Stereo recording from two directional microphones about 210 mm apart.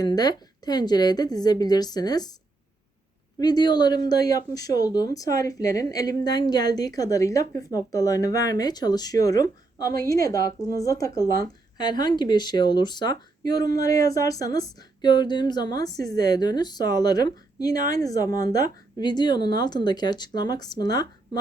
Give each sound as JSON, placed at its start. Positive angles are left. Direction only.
{"t": 0.0, "sound": "a woman's voice", "side_deg": 20}
{"t": 3.3, "sound": "a woman's voice", "side_deg": 20}